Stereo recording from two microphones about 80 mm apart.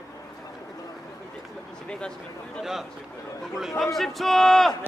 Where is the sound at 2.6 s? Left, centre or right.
Centre.